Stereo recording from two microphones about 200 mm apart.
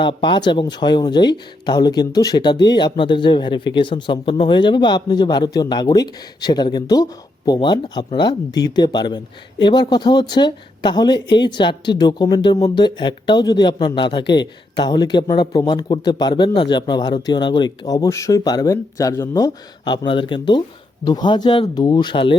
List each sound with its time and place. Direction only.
0.0 s speech: 25° left (ahead or behind)